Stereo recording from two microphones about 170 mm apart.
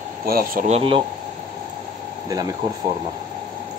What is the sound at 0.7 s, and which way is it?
Speech, 30° right (ahead or behind).